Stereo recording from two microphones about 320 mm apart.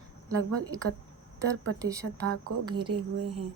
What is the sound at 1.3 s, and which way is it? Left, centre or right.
Speech, centre.